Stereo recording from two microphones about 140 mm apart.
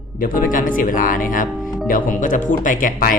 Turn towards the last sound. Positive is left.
turn(degrees=80)